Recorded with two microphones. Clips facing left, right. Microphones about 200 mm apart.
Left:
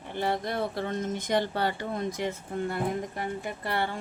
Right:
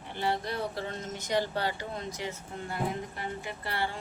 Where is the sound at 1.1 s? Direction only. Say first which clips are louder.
Even; 55° left (ahead or behind).